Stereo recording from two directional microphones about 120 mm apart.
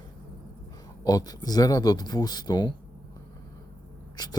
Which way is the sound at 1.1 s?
30° left (ahead or behind).